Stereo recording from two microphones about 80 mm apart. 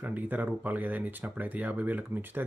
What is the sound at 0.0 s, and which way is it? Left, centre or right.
Speech, right.